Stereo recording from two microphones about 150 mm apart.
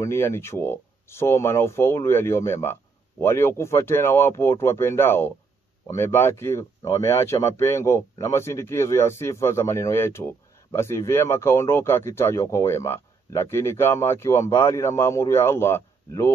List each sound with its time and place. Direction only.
0.0 s speech: 15° left (ahead or behind)